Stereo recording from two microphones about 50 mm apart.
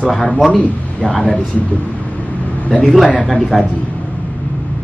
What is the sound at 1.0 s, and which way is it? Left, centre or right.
Speech, centre.